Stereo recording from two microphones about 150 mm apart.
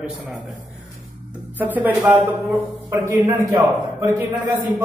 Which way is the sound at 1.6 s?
10° right (ahead or behind).